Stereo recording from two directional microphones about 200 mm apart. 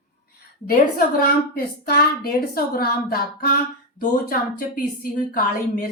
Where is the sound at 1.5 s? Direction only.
50° left (ahead or behind).